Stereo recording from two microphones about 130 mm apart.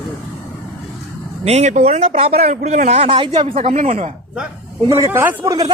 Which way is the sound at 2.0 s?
50° right (ahead or behind).